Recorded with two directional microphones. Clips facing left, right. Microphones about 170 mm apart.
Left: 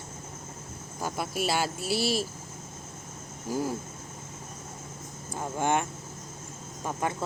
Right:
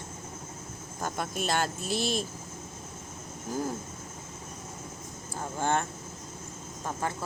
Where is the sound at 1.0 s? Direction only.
5° left (ahead or behind).